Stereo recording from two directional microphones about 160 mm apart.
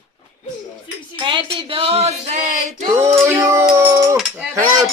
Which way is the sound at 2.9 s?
20° right (ahead or behind).